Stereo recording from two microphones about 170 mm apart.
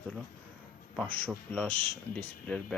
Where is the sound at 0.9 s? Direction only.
10° left (ahead or behind).